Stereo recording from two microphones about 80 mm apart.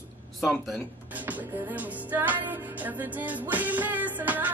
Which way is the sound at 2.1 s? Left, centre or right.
Right.